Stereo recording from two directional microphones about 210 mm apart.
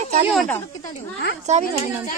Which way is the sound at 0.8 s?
40° left (ahead or behind).